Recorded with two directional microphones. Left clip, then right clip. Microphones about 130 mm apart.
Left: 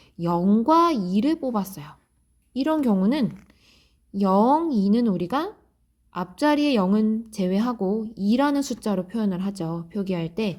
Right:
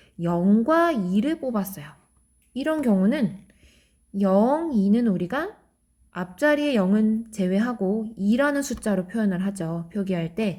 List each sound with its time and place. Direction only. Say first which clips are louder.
0.0 s a woman's voice: left 1 dB; 25° left (ahead or behind)